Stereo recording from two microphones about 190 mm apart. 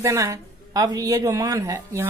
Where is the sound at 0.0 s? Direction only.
15° right (ahead or behind).